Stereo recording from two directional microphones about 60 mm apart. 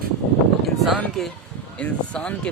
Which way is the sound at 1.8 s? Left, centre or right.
Centre.